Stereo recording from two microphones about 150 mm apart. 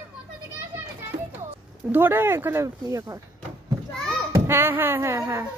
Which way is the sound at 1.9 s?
15° right (ahead or behind).